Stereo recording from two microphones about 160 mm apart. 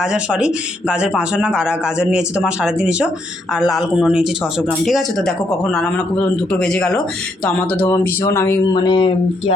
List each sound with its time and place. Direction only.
0.0 s a man's voice: 5° right (ahead or behind); by 8.5 s 15° left (ahead or behind)
8.7 s speech: 25° left (ahead or behind)